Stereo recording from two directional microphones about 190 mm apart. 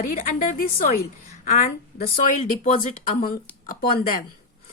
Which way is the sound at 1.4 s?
40° left (ahead or behind).